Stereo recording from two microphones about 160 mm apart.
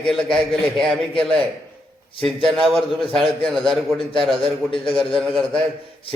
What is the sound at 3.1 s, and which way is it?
A man's voice, centre (ahead or behind).